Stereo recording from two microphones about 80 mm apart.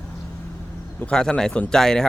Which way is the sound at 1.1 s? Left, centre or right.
Centre.